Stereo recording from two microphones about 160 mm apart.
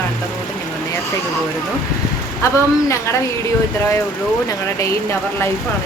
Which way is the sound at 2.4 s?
20° left (ahead or behind).